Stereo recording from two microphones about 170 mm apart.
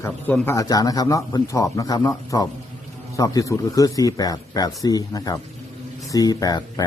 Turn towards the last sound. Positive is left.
turn(degrees=20)  # may be behind; listen again after turning